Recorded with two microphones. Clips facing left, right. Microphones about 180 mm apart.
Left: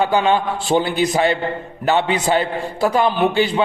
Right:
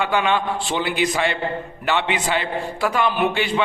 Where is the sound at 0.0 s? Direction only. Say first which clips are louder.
Left 4 dB; 40° left (ahead or behind).